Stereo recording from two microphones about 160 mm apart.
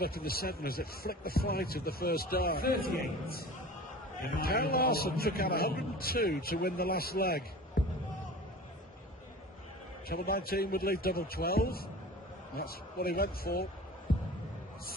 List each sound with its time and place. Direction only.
0.0 s speech: 70° left (ahead or behind)
10.1 s speech: 70° left (ahead or behind)